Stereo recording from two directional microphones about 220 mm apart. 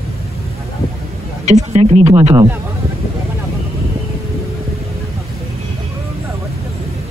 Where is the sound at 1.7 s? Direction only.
30° right (ahead or behind).